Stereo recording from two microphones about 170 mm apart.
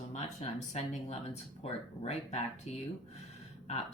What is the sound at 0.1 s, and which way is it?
Speech, 40° left (ahead or behind).